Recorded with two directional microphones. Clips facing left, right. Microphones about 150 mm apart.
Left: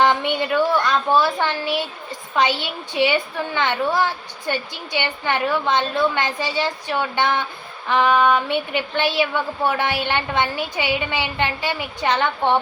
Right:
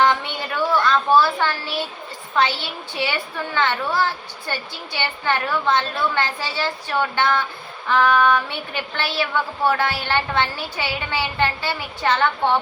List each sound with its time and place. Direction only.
0.0 s a child's voice: 20° left (ahead or behind)